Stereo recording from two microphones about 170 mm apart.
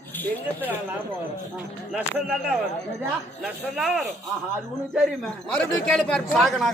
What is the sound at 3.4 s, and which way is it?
A man's voice, centre (ahead or behind).